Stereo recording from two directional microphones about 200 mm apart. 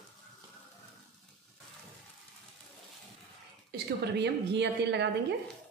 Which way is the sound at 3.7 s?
60° right (ahead or behind).